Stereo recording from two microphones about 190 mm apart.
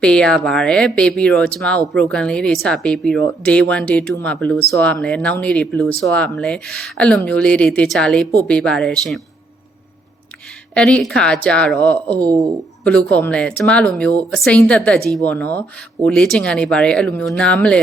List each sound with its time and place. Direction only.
0.0 s speech: 5° left (ahead or behind)
10.8 s speech: 5° left (ahead or behind)
12.2 s speech: 20° right (ahead or behind)
12.8 s speech: 5° left (ahead or behind)